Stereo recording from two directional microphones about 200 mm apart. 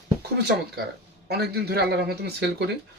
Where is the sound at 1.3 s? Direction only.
55° right (ahead or behind).